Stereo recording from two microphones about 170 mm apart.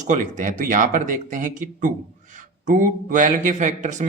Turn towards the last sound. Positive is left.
turn(degrees=-45)  # may be behind; listen again after turning